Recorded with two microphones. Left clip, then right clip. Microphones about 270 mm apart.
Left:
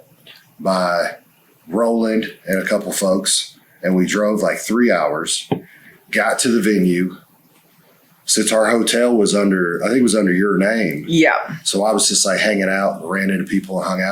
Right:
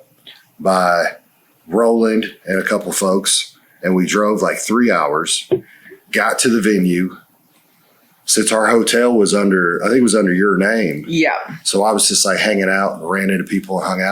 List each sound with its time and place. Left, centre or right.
0.6 s speech: right
8.2 s speech: right
11.1 s speech: left
11.6 s speech: right